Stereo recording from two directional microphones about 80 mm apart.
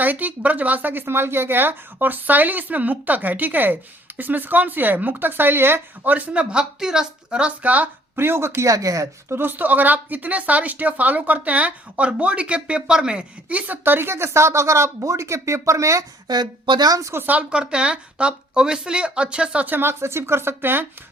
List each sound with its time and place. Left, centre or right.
0.0 s speech: right
9.3 s speech: right
16.2 s speech: right
17.0 s speech: right
17.2 s a woman's voice: centre